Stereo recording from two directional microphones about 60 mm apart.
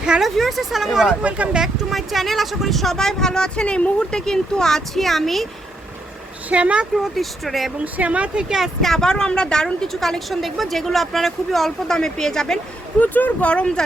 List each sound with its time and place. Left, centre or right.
0.2 s speech: centre
4.3 s speech: centre
6.5 s speech: right
6.9 s speech: centre
7.9 s speech: right
8.4 s speech: centre
8.8 s a woman's voice: centre
13.0 s speech: left